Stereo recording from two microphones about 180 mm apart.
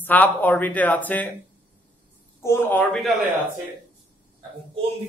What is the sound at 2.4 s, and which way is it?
Speech, 15° left (ahead or behind).